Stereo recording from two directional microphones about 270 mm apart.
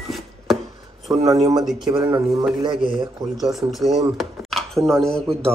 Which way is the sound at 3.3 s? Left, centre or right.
Centre.